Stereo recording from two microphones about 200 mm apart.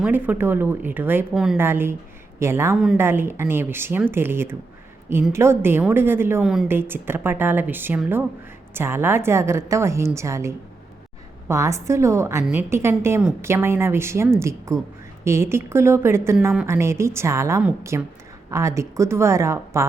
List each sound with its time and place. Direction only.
0.0 s a woman's voice: 10° right (ahead or behind)
2.7 s a woman's voice: centre (ahead or behind)